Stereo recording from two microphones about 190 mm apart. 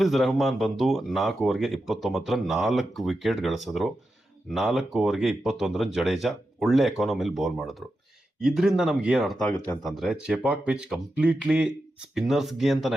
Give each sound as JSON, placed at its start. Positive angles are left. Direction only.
{"t": 0.0, "sound": "speech", "side_deg": 0}